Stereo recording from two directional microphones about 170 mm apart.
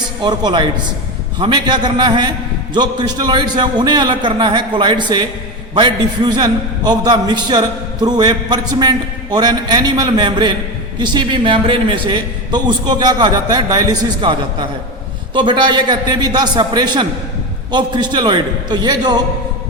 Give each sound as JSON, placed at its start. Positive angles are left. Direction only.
{"t": 0.2, "sound": "a man's voice", "side_deg": -25}